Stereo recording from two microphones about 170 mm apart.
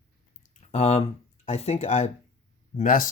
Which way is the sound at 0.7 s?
40° left (ahead or behind).